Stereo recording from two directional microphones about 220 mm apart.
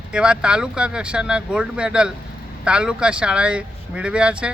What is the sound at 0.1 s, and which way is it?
Speech, 5° right (ahead or behind).